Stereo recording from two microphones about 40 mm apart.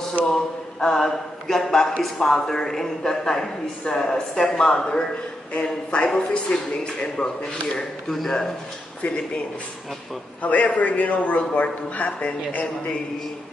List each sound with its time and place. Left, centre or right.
0.2 s speech: centre
5.5 s speech: left
8.1 s speech: centre
9.0 s speech: left
10.4 s speech: left